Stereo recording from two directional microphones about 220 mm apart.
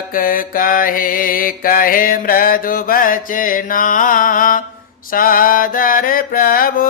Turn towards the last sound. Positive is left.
turn(degrees=40)  # may be behind; listen again after turning